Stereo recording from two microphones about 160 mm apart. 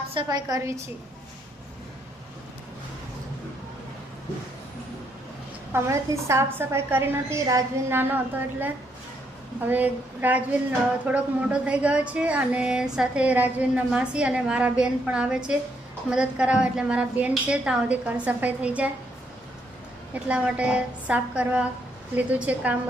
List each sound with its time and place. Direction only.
0.1 s a woman's voice: 30° right (ahead or behind)
5.7 s a woman's voice: 20° right (ahead or behind)
20.2 s a woman's voice: 5° right (ahead or behind)